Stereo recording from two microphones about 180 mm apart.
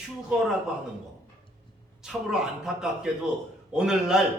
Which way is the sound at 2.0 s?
5° right (ahead or behind).